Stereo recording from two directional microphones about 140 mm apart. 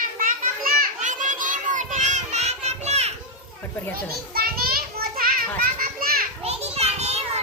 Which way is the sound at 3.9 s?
90° right.